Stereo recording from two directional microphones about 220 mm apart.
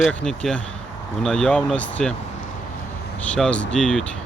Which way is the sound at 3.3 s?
5° left (ahead or behind).